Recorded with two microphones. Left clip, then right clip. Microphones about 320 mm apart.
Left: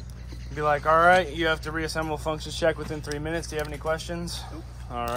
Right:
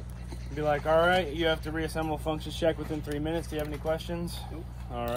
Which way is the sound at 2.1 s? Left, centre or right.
Left.